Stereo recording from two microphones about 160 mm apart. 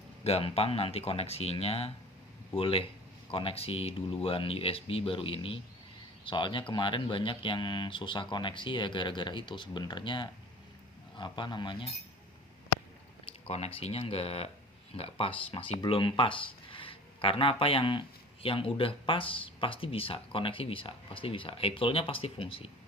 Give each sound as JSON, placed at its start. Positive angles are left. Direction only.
{"t": 0.3, "sound": "speech", "side_deg": 40}
{"t": 13.2, "sound": "speech", "side_deg": 40}